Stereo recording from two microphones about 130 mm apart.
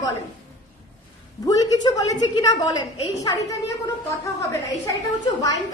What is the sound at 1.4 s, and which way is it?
A woman's voice, 25° left (ahead or behind).